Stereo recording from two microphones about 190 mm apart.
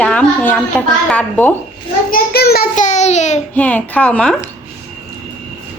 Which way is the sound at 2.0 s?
50° left (ahead or behind).